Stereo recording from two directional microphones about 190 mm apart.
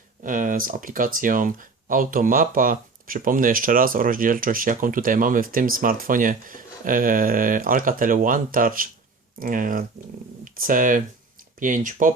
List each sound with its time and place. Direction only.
0.2 s speech: 45° right (ahead or behind)